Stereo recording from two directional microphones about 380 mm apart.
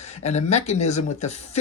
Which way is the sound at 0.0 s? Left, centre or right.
Centre.